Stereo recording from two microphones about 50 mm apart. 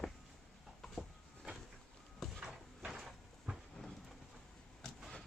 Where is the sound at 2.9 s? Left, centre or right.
Centre.